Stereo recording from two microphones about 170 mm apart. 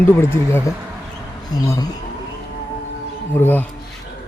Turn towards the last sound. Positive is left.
turn(degrees=10)  # may be behind; listen again after turning